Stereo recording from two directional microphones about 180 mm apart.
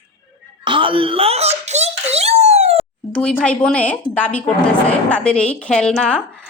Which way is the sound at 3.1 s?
5° left (ahead or behind).